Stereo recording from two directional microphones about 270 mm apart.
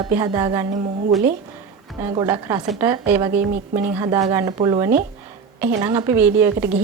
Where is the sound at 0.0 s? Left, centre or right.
Centre.